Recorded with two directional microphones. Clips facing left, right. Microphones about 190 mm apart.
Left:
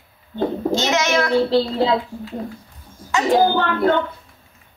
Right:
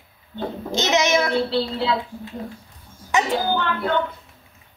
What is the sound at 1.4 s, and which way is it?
Speech, 40° left (ahead or behind).